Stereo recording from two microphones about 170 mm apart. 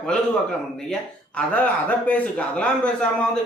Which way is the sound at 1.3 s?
10° left (ahead or behind).